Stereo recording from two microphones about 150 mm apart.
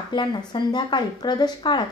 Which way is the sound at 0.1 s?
30° left (ahead or behind).